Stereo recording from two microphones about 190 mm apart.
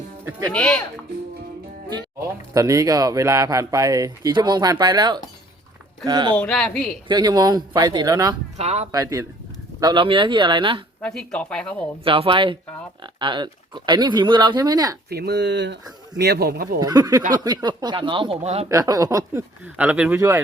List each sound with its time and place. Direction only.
0.3 s a sound: 10° right (ahead or behind)
0.5 s speech: 5° left (ahead or behind)
2.5 s speech: 15° right (ahead or behind)
6.3 s a woman's voice: 5° left (ahead or behind)
7.1 s speech: 20° right (ahead or behind)
8.5 s speech: 35° right (ahead or behind)
8.9 s a sound: 15° right (ahead or behind)
9.8 s speech: 25° right (ahead or behind)
11.0 s speech: 5° left (ahead or behind)
12.0 s speech: 30° right (ahead or behind)
15.1 s speech: 60° right (ahead or behind)
16.8 s speech: 20° right (ahead or behind)
18.7 s a sound: 15° right (ahead or behind)